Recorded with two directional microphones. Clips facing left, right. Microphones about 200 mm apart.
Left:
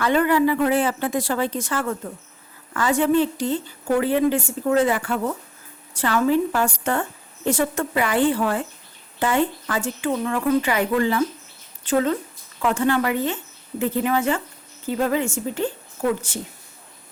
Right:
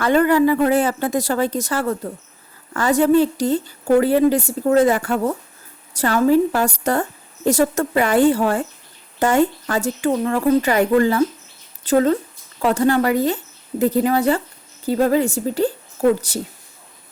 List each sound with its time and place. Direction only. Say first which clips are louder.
0.0 s a woman's voice: right 4 dB; 45° right (ahead or behind)